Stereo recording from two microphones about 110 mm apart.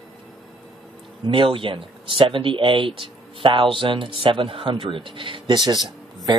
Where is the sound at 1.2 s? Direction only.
50° right (ahead or behind).